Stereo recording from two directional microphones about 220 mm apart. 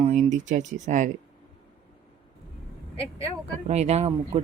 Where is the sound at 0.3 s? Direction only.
35° right (ahead or behind).